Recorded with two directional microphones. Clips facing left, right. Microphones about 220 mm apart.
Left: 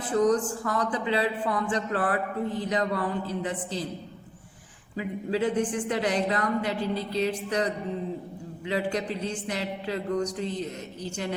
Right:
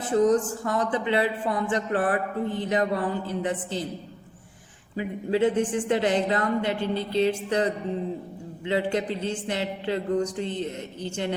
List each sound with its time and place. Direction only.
0.1 s a woman's voice: 25° right (ahead or behind)
4.9 s a woman's voice: 25° right (ahead or behind)